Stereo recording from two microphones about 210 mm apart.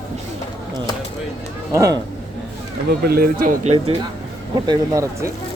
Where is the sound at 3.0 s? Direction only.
45° right (ahead or behind).